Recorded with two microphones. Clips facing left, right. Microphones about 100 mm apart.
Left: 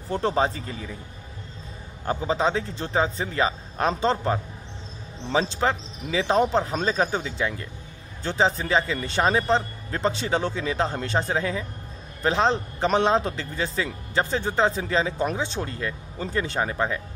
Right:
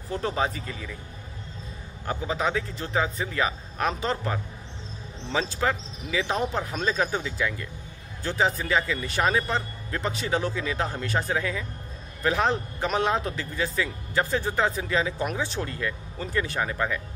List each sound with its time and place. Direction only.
0.1 s speech: 30° left (ahead or behind)
2.0 s speech: 30° left (ahead or behind)